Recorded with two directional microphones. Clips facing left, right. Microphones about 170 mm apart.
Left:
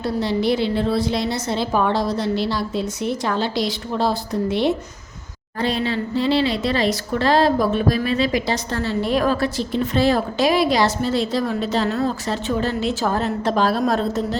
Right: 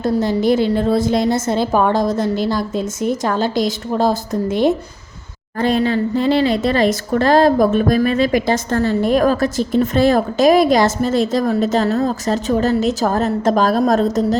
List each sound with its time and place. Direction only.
0.0 s speech: 45° right (ahead or behind)